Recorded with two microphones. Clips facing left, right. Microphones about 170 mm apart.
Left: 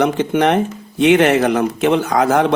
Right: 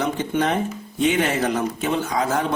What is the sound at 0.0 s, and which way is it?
Speech, 75° left (ahead or behind).